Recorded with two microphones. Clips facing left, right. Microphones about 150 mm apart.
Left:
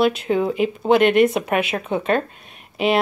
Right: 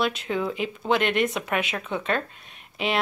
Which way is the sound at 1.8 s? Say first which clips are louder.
Left 7 dB; 40° left (ahead or behind).